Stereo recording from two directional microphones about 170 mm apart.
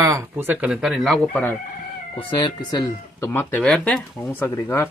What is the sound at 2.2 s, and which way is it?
Speech, 30° left (ahead or behind).